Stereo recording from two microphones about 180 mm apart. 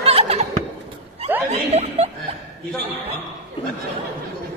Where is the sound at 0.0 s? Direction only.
35° right (ahead or behind).